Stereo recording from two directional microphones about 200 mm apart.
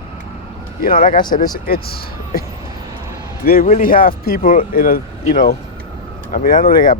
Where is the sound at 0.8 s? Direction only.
45° left (ahead or behind).